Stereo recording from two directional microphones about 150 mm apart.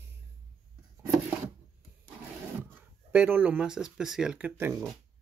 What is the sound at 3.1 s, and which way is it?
Speech, 10° right (ahead or behind).